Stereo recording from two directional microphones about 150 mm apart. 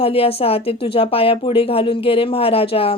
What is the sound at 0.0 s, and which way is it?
Speech, 40° left (ahead or behind).